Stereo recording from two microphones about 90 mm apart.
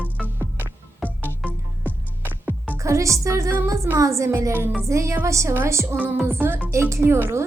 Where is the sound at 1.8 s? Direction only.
20° right (ahead or behind).